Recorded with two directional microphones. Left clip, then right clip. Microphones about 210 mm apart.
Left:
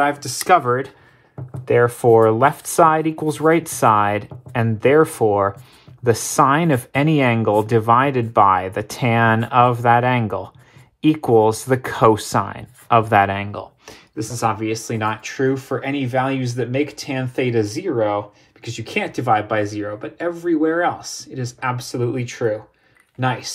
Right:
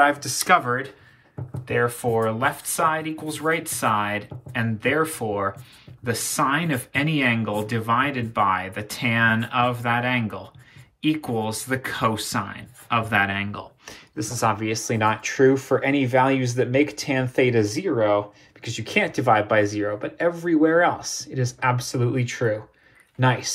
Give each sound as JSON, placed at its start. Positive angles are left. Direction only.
{"t": 0.0, "sound": "speech", "side_deg": 35}